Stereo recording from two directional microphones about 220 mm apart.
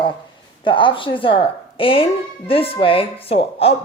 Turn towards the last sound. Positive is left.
turn(degrees=25)  # may be behind; listen again after turning